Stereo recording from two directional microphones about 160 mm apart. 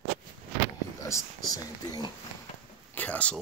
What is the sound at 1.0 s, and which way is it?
Speech, 20° left (ahead or behind).